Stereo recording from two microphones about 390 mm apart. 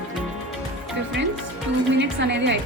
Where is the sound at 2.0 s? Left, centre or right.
Right.